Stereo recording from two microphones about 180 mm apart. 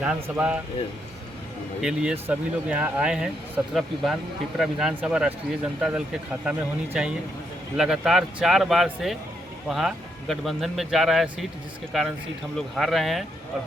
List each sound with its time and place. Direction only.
0.0 s speech: 5° right (ahead or behind)
1.8 s speech: 5° right (ahead or behind)